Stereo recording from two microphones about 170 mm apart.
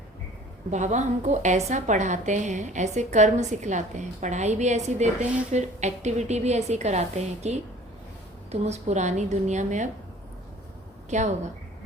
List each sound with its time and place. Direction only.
0.7 s a woman's voice: 45° right (ahead or behind)
8.6 s a woman's voice: 40° right (ahead or behind)
11.1 s a woman's voice: 45° right (ahead or behind)